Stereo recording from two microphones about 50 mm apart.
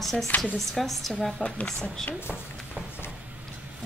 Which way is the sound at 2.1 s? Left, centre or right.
Left.